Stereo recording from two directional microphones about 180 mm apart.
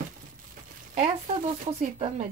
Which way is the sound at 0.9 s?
40° right (ahead or behind).